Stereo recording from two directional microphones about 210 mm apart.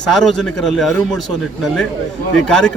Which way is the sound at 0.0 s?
Centre (ahead or behind).